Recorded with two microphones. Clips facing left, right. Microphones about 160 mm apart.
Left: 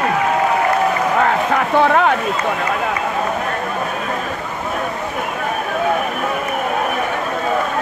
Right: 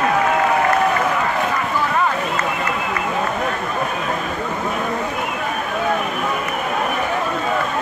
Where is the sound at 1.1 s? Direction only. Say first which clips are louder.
Left 5 dB; 75° left (ahead or behind).